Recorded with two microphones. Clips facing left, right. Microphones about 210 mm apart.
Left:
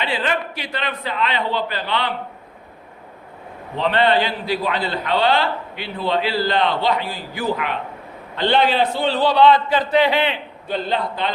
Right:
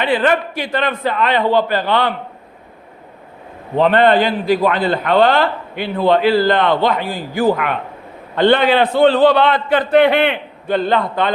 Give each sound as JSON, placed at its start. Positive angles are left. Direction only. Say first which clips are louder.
{"t": 0.0, "sound": "a man's voice", "louder": "right 7 dB", "side_deg": -55}
{"t": 3.8, "sound": "a man's voice", "louder": "right 6 dB", "side_deg": -50}